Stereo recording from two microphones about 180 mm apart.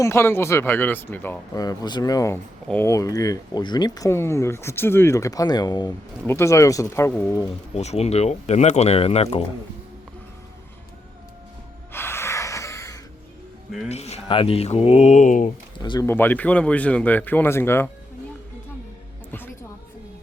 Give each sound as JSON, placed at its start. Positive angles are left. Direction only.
{"t": 0.0, "sound": "speech", "side_deg": 15}
{"t": 1.5, "sound": "speech", "side_deg": 20}
{"t": 7.7, "sound": "speech", "side_deg": 35}
{"t": 11.9, "sound": "music", "side_deg": 15}
{"t": 13.8, "sound": "speech", "side_deg": 35}
{"t": 15.8, "sound": "speech", "side_deg": 25}
{"t": 16.0, "sound": "speech", "side_deg": 10}